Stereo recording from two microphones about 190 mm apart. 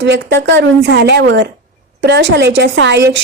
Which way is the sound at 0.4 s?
65° right (ahead or behind).